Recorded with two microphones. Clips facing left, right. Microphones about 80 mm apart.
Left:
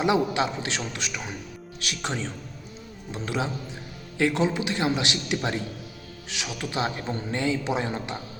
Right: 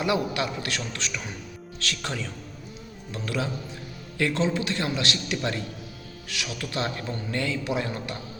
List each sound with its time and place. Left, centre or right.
0.0 s a man's voice: left